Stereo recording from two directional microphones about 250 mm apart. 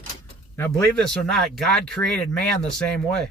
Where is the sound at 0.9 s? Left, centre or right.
Centre.